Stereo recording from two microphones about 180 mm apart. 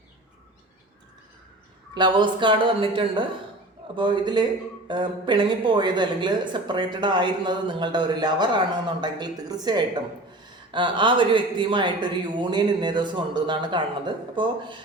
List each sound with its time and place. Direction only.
2.0 s speech: 25° right (ahead or behind)